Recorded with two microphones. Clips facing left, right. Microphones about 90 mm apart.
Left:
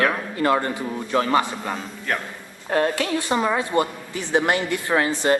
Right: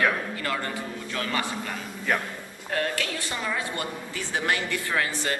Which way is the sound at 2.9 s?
20° left (ahead or behind).